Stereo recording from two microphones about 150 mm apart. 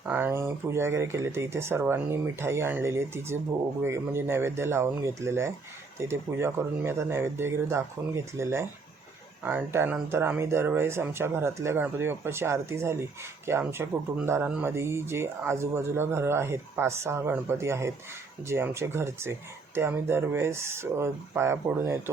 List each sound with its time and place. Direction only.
0.0 s speech: 15° right (ahead or behind)